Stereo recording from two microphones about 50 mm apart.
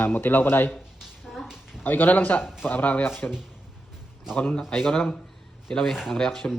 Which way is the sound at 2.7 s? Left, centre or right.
Left.